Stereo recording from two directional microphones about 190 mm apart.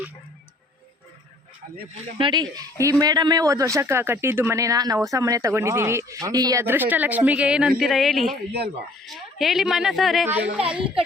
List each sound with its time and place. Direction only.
2.1 s a woman's voice: 25° right (ahead or behind); by 10.8 s 5° right (ahead or behind)